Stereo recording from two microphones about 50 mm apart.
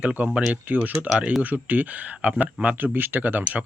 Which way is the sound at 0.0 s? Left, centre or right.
Right.